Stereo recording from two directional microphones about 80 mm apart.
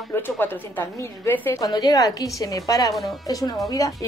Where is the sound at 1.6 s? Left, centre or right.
Left.